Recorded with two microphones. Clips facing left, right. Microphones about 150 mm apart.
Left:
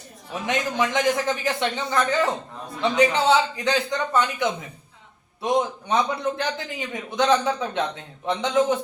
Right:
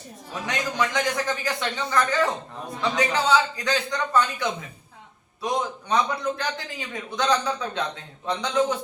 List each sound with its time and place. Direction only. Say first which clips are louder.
0.4 s a man's voice: left 3 dB; 20° left (ahead or behind)